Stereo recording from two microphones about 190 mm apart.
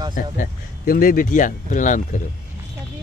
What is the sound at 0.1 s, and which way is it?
Speech, 45° left (ahead or behind).